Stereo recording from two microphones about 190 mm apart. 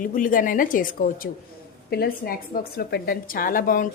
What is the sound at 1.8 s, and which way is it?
A woman's voice, 55° left (ahead or behind).